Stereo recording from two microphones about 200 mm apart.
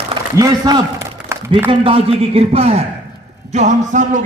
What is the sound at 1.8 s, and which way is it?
A man's voice, 30° right (ahead or behind).